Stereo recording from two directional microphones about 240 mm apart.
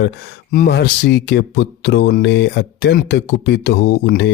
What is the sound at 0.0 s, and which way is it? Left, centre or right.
Speech, left.